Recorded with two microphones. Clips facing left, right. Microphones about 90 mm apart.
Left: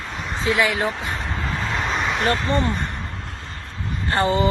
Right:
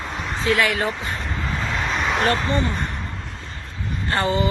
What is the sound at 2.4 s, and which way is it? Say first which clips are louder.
Speech: left 1 dB; 50° left (ahead or behind).